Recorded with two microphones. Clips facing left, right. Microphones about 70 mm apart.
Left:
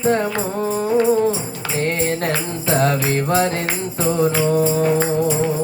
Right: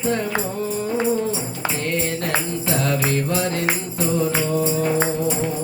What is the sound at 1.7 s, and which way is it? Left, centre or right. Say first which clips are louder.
Music: left 6 dB; left.